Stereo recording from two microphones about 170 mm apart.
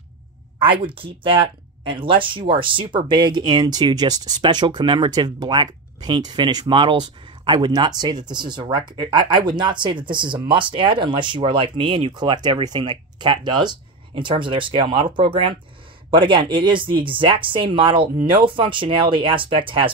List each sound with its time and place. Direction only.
0.7 s speech: 30° right (ahead or behind)